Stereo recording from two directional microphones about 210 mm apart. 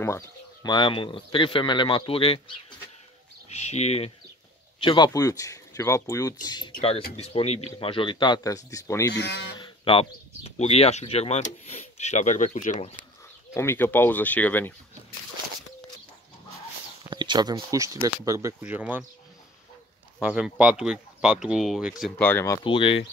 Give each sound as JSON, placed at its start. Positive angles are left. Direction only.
{"t": 0.7, "sound": "speech", "side_deg": 20}
{"t": 7.2, "sound": "speech", "side_deg": 30}
{"t": 9.1, "sound": "speech", "side_deg": 55}
{"t": 9.6, "sound": "speech", "side_deg": 25}
{"t": 13.6, "sound": "speech", "side_deg": 10}
{"t": 17.1, "sound": "speech", "side_deg": -20}
{"t": 20.2, "sound": "speech", "side_deg": -5}
{"t": 22.7, "sound": "speech", "side_deg": 25}